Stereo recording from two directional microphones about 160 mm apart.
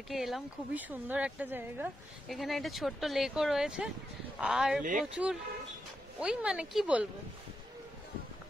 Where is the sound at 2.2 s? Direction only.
Centre (ahead or behind).